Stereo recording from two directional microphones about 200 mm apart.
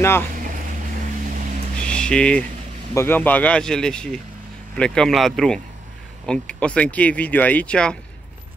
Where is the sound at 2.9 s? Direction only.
10° left (ahead or behind).